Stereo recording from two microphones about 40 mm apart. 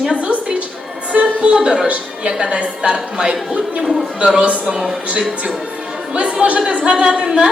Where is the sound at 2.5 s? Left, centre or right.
Right.